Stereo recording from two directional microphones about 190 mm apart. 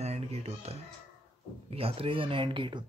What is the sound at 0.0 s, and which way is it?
Music, 35° right (ahead or behind).